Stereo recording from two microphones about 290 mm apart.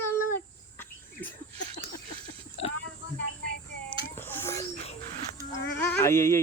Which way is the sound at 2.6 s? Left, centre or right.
Left.